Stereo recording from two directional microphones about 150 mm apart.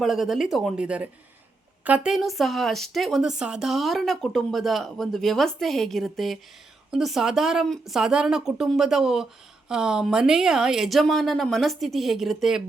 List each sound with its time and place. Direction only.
0.0 s speech: centre (ahead or behind)